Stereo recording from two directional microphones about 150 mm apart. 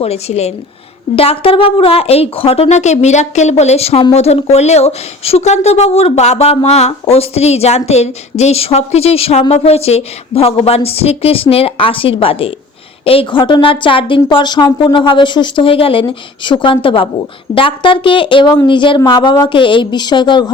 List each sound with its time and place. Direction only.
0.0 s speech: 45° left (ahead or behind)